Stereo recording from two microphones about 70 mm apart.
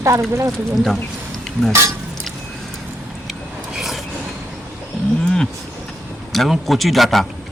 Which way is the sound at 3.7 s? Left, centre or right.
Centre.